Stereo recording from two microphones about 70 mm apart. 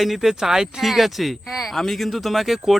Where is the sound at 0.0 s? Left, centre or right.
Centre.